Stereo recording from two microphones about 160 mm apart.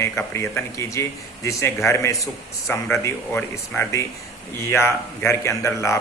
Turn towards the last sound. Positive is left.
turn(degrees=20)  # may be behind; listen again after turning